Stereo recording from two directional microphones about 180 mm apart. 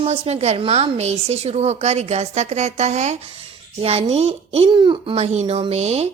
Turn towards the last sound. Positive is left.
turn(degrees=-35)  # may be behind; listen again after turning